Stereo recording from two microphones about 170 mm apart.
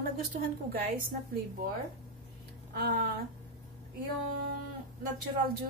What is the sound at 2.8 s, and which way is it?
Speech, 65° right (ahead or behind).